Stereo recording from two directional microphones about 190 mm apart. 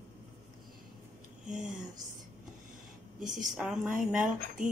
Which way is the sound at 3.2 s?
45° right (ahead or behind).